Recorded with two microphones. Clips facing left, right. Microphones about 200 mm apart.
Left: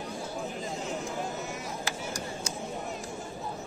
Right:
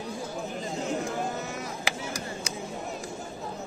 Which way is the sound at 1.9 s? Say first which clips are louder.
Right 2 dB; 80° right.